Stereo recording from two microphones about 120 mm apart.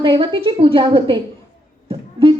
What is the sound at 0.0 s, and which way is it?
A woman's voice, 45° right (ahead or behind).